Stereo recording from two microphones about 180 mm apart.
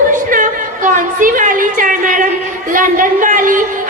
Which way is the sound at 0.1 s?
45° right (ahead or behind).